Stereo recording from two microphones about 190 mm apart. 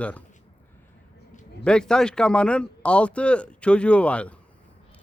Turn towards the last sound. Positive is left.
turn(degrees=5)  # may be behind; listen again after turning